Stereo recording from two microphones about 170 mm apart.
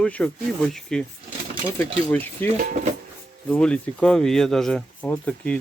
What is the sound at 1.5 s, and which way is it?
Speech, 35° right (ahead or behind).